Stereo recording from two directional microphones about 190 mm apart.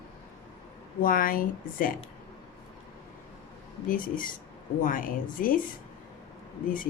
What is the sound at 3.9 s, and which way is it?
Speech, 45° left (ahead or behind).